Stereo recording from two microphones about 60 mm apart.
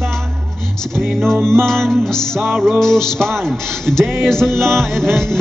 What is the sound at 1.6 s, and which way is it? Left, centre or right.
Music, centre.